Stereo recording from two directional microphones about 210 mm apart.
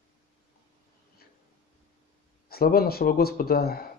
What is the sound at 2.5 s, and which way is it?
Speech, 45° left (ahead or behind).